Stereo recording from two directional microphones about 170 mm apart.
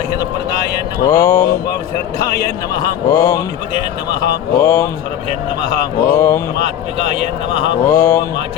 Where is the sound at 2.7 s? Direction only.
20° left (ahead or behind).